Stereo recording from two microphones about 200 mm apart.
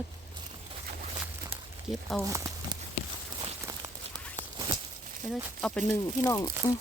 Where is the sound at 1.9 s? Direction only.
Centre (ahead or behind).